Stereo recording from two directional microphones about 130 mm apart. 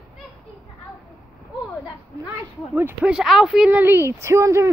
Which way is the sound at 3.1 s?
Centre (ahead or behind).